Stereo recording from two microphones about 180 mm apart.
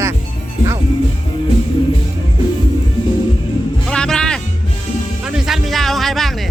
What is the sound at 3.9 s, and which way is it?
Music, 5° left (ahead or behind).